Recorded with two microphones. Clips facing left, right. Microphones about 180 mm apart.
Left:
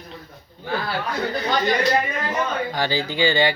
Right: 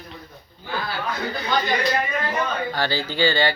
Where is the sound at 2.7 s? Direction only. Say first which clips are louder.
Left 1 dB; 15° left (ahead or behind).